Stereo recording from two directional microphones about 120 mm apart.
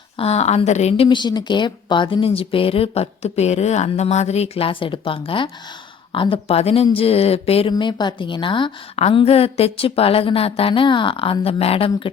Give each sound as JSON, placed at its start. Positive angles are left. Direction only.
{"t": 0.2, "sound": "a woman's voice", "side_deg": 60}
{"t": 1.0, "sound": "a woman's voice", "side_deg": 40}
{"t": 7.7, "sound": "speech", "side_deg": 40}
{"t": 9.0, "sound": "a woman's voice", "side_deg": 55}